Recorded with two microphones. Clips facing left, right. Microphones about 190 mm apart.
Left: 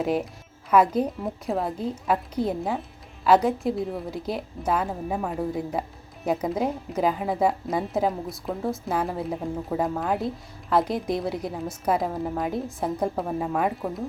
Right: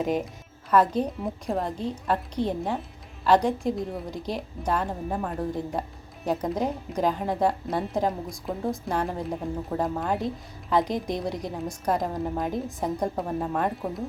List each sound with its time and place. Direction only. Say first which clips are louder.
0.0 s a woman's voice: left 1 dB; 5° left (ahead or behind)